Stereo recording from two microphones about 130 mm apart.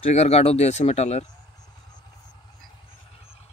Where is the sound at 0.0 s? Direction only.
55° left (ahead or behind).